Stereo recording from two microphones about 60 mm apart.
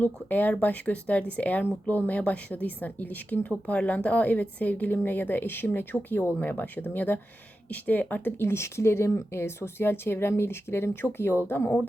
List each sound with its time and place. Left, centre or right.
0.0 s speech: left